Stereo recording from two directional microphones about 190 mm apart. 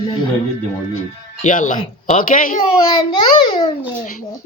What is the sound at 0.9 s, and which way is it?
A man's voice, 40° left (ahead or behind).